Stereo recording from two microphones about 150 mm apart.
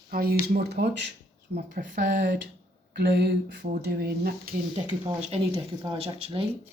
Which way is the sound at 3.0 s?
90° right.